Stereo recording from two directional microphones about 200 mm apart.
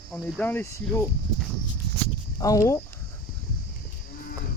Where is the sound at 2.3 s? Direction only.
15° left (ahead or behind).